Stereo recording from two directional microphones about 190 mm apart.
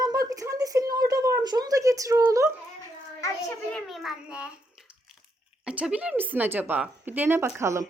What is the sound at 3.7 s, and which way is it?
Speech, centre (ahead or behind).